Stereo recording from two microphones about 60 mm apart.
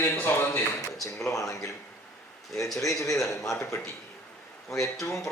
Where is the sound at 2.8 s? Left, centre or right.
Left.